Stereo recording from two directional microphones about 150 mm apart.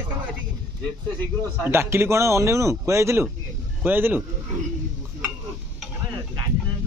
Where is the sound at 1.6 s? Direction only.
15° right (ahead or behind).